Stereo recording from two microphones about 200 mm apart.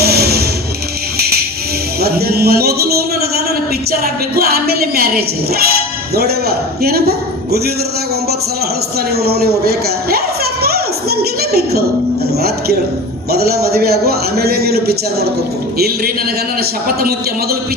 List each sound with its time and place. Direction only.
0.0 s music: 50° right (ahead or behind)
2.0 s a sound: 50° right (ahead or behind)
6.1 s a man's voice: 50° right (ahead or behind)
9.1 s a sound: 50° right (ahead or behind)
13.3 s a man's voice: 50° right (ahead or behind)
17.0 s a man's voice: 50° right (ahead or behind)